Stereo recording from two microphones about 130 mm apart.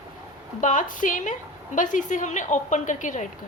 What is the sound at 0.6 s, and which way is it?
A woman's voice, 90° left.